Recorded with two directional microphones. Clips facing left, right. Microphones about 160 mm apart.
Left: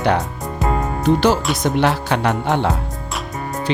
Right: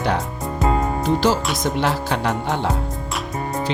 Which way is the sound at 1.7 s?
70° left (ahead or behind).